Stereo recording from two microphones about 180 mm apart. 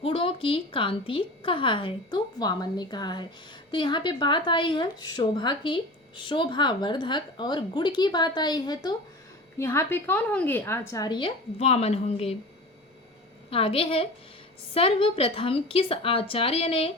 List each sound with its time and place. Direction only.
0.0 s speech: 30° left (ahead or behind)
13.5 s a woman's voice: 30° left (ahead or behind)